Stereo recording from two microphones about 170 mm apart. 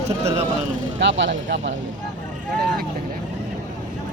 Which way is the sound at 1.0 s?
90° right.